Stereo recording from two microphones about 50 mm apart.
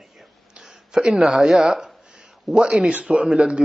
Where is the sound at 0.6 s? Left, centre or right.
Centre.